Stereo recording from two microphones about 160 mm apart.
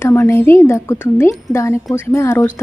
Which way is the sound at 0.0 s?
15° left (ahead or behind).